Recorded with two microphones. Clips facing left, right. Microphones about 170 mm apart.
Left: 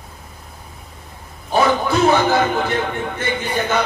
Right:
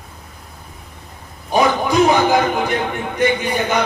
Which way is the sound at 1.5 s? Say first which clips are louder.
Right 2 dB; 15° right (ahead or behind).